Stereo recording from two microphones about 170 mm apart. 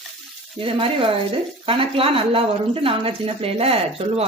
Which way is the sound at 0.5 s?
30° right (ahead or behind).